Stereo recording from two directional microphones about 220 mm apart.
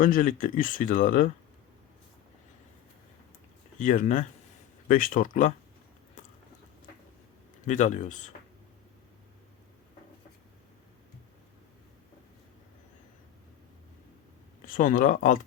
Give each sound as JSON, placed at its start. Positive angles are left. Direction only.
{"t": 0.0, "sound": "speech", "side_deg": 40}
{"t": 3.8, "sound": "speech", "side_deg": 35}
{"t": 6.2, "sound": "a sound", "side_deg": 35}
{"t": 7.7, "sound": "speech", "side_deg": 35}
{"t": 14.7, "sound": "speech", "side_deg": 35}